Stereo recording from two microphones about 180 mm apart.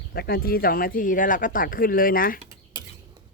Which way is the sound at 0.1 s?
60° left (ahead or behind).